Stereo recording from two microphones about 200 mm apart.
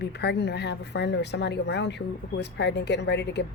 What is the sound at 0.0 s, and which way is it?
Speech, 55° left (ahead or behind).